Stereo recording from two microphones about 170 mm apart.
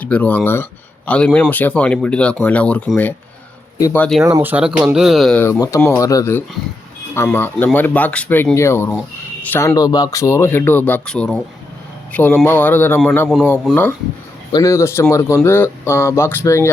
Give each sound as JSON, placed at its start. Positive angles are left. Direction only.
{"t": 0.0, "sound": "speech", "side_deg": 10}
{"t": 4.2, "sound": "speech", "side_deg": -20}
{"t": 4.5, "sound": "speech", "side_deg": -5}
{"t": 5.5, "sound": "speech", "side_deg": 20}
{"t": 14.5, "sound": "speech", "side_deg": 15}